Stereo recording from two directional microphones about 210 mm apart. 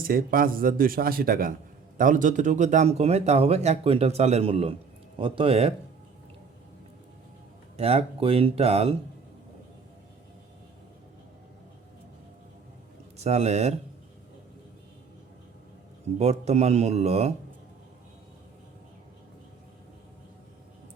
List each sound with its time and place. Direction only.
0.1 s speech: 45° right (ahead or behind); by 5.7 s 25° right (ahead or behind)
7.8 s speech: 30° right (ahead or behind)
13.1 s speech: 30° right (ahead or behind)
16.1 s speech: 30° right (ahead or behind)